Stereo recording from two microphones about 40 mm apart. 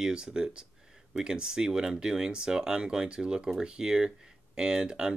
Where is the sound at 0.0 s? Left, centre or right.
Right.